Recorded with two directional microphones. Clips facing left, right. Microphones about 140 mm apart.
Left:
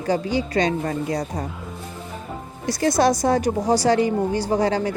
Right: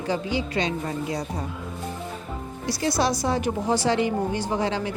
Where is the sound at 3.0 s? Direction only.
45° left (ahead or behind).